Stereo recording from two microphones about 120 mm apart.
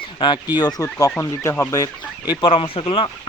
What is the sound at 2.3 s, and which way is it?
Speech, 45° left (ahead or behind).